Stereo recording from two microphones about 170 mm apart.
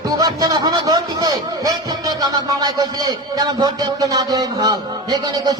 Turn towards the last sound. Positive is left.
turn(degrees=-25)  # may be behind; listen again after turning